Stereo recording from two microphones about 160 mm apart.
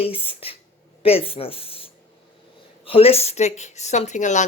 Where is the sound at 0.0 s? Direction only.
35° left (ahead or behind).